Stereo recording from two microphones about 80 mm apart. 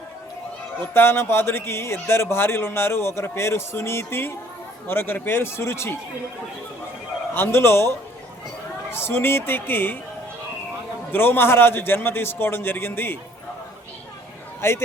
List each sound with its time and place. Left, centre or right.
0.9 s a man's voice: left
7.3 s a man's voice: left
8.9 s a man's voice: left
11.1 s a man's voice: left
14.6 s a man's voice: left